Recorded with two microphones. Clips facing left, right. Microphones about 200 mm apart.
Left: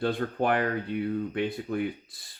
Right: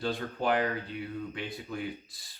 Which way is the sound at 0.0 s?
55° left (ahead or behind).